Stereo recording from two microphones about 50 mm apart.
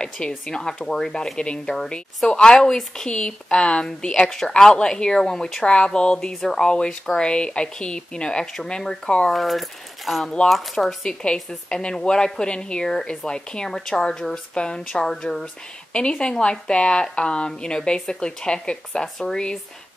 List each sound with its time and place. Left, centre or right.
0.5 s a woman's voice: centre
9.3 s speech: centre
11.3 s a woman's voice: centre
19.1 s a woman's voice: centre